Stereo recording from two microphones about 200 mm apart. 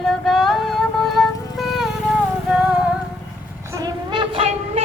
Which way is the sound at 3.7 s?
20° right (ahead or behind).